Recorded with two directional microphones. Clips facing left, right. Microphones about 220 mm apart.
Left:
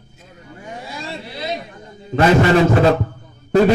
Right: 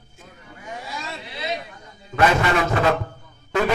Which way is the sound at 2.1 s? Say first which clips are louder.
Left 6 dB; 35° left (ahead or behind).